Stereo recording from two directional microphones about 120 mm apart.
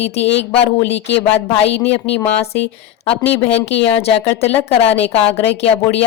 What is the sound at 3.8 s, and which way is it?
Speech, 55° left (ahead or behind).